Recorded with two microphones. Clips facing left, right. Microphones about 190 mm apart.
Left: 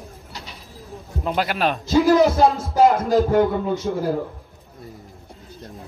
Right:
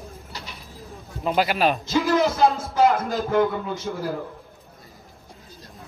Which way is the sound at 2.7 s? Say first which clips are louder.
Left 4 dB; 35° left (ahead or behind).